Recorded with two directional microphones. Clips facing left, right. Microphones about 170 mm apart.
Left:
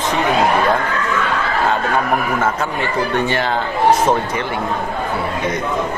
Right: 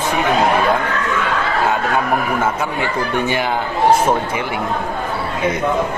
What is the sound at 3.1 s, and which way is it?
Speech, 10° right (ahead or behind).